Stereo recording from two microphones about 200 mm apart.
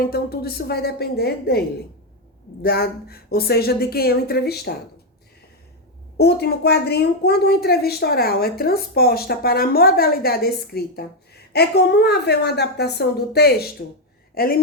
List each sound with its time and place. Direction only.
0.0 s a woman's voice: 50° left (ahead or behind)
6.1 s a woman's voice: 55° left (ahead or behind)